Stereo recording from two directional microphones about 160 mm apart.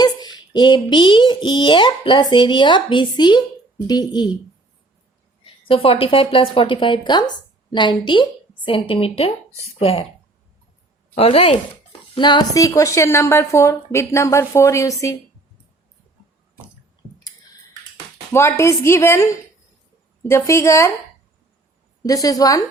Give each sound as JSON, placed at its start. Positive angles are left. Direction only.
{"t": 0.0, "sound": "speech", "side_deg": 25}
{"t": 5.6, "sound": "a woman's voice", "side_deg": 35}
{"t": 11.1, "sound": "speech", "side_deg": 40}
{"t": 18.3, "sound": "a woman's voice", "side_deg": 15}
{"t": 20.3, "sound": "a woman's voice", "side_deg": 20}
{"t": 22.0, "sound": "speech", "side_deg": 20}